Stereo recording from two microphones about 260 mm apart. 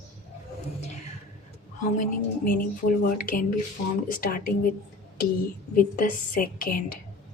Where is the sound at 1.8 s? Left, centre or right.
Left.